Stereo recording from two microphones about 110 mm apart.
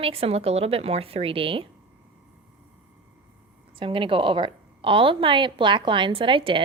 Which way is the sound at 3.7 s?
50° right (ahead or behind).